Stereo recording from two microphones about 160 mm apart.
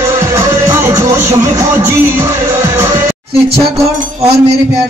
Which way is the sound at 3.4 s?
40° right (ahead or behind).